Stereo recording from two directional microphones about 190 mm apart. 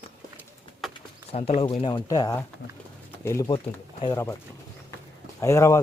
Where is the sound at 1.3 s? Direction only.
30° left (ahead or behind).